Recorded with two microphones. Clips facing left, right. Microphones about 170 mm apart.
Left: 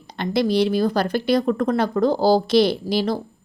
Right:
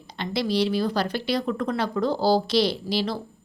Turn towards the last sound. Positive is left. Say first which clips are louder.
# left 5 dB
turn(degrees=50)  # may be behind; listen again after turning